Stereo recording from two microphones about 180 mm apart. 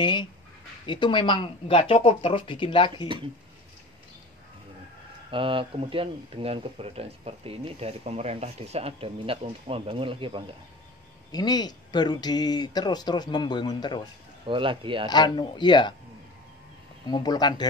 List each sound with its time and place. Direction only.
0.0 s speech: 25° left (ahead or behind)
5.3 s speech: 30° right (ahead or behind)
11.3 s speech: 20° left (ahead or behind)
14.5 s speech: 30° right (ahead or behind)
15.0 s speech: 25° left (ahead or behind)
17.1 s speech: 20° left (ahead or behind)